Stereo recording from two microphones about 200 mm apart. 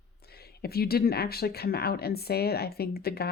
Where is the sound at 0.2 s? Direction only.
50° left (ahead or behind).